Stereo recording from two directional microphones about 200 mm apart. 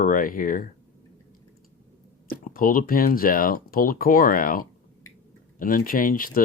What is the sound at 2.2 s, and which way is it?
Speech, 45° left (ahead or behind).